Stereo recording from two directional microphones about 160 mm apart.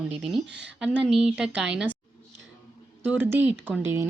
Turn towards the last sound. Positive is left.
turn(degrees=-15)  # may be behind; listen again after turning